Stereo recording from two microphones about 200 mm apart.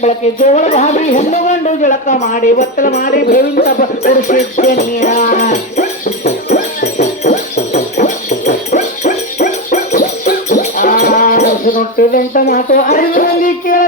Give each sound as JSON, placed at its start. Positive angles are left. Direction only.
{"t": 0.0, "sound": "speech", "side_deg": 35}
{"t": 7.3, "sound": "music", "side_deg": 40}
{"t": 7.9, "sound": "dog", "side_deg": 40}